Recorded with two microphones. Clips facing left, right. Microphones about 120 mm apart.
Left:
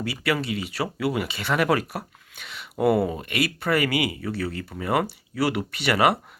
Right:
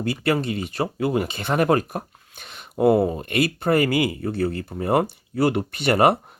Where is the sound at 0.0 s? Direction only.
45° right (ahead or behind).